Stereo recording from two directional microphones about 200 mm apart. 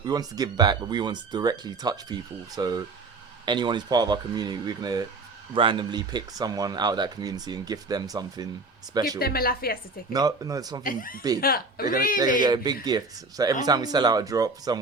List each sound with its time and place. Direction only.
0.0 s speech: 20° right (ahead or behind)
9.1 s a woman's voice: 50° left (ahead or behind)
10.1 s speech: 20° right (ahead or behind)
10.8 s a woman's voice: 45° left (ahead or behind)
12.4 s speech: 20° right (ahead or behind)